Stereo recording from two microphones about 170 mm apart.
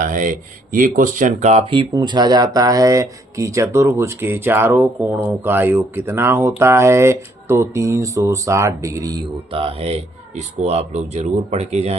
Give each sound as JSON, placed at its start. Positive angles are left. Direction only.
{"t": 0.0, "sound": "speech", "side_deg": -50}
{"t": 9.5, "sound": "a man's voice", "side_deg": -35}